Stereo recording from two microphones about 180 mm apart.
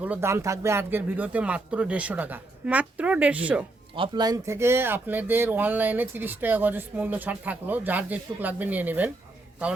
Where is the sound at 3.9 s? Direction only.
25° right (ahead or behind); by 9.1 s 10° right (ahead or behind).